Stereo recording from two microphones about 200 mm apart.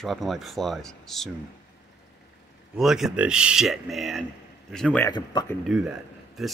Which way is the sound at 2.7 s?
Centre (ahead or behind).